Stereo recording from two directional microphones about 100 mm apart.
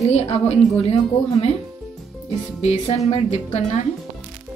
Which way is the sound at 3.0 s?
75° left (ahead or behind).